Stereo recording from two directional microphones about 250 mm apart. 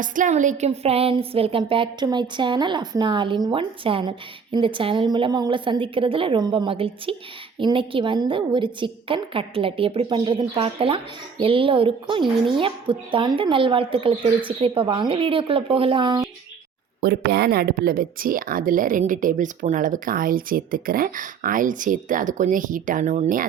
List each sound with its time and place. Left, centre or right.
0.0 s a woman's voice: right
17.0 s speech: right